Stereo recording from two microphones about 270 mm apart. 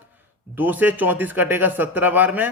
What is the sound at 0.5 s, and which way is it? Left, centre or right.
A man's voice, centre.